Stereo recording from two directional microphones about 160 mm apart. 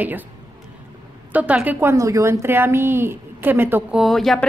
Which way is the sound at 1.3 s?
10° right (ahead or behind).